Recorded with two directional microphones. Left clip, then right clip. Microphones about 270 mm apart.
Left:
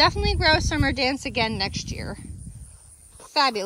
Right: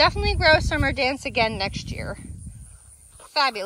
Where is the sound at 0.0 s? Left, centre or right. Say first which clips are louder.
Right 1 dB; centre.